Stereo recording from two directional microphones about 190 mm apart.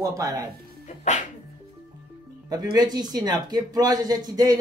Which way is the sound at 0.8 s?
40° left (ahead or behind).